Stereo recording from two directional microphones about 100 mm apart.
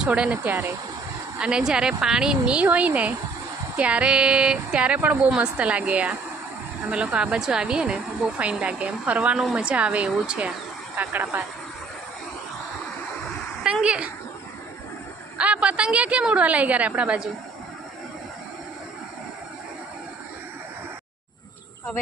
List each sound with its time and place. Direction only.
0.0 s speech: 10° right (ahead or behind)
13.8 s speech: 10° right (ahead or behind)
15.4 s speech: 10° right (ahead or behind)